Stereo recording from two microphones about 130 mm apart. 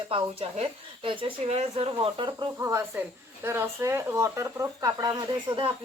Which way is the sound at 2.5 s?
20° right (ahead or behind).